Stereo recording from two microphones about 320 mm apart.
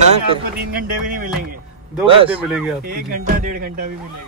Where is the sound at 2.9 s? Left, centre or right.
Right.